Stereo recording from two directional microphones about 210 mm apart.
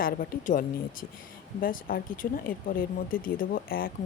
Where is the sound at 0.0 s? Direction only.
45° left (ahead or behind).